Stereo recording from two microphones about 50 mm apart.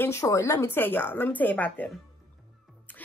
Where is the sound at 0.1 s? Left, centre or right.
Left.